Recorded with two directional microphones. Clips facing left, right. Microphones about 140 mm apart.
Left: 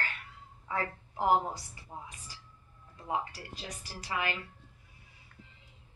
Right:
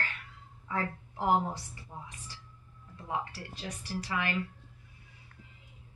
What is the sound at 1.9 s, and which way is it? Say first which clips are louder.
Speech: left 1 dB; 20° left (ahead or behind).